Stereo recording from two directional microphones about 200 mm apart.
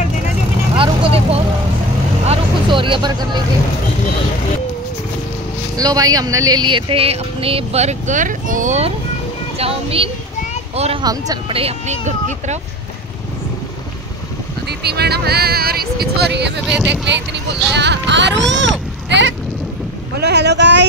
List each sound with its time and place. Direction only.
0.7 s vehicle: 30° right (ahead or behind)
5.8 s speech: 20° right (ahead or behind); by 12.5 s 35° right (ahead or behind)
14.7 s speech: 55° right (ahead or behind)
16.6 s speech: centre (ahead or behind)
17.0 s speech: 60° right (ahead or behind)